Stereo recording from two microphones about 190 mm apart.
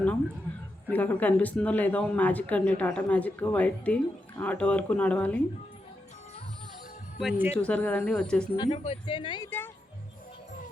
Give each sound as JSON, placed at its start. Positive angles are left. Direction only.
{"t": 0.9, "sound": "speech", "side_deg": 10}
{"t": 7.2, "sound": "speech", "side_deg": -5}
{"t": 7.5, "sound": "speech", "side_deg": 5}
{"t": 8.5, "sound": "speech", "side_deg": 30}